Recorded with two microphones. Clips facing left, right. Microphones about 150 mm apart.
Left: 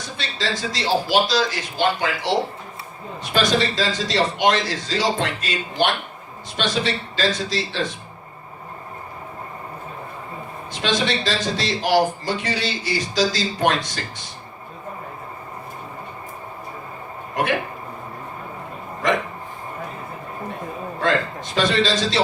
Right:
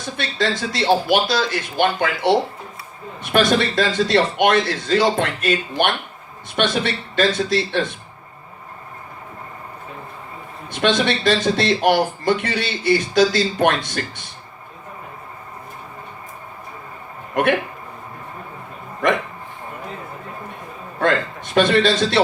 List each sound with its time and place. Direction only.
0.2 s speech: 55° right (ahead or behind)
3.3 s speech: 55° right (ahead or behind)
10.7 s speech: 55° right (ahead or behind)
17.4 s speech: 55° right (ahead or behind)
21.0 s speech: 55° right (ahead or behind)